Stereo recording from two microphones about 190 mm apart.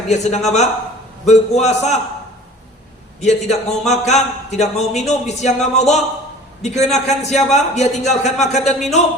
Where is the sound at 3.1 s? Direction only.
35° left (ahead or behind).